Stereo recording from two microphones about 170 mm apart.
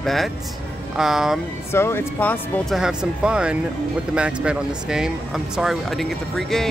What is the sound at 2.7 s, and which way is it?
Speech, 5° right (ahead or behind).